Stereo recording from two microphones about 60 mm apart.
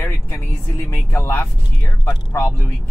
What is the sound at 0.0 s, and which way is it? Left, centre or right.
Speech, left.